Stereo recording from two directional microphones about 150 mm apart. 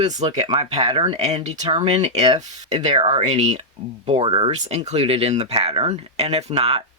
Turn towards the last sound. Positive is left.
turn(degrees=-45)  # may be behind; listen again after turning